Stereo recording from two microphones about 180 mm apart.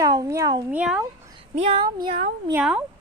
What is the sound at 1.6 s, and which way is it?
Speech, 25° right (ahead or behind).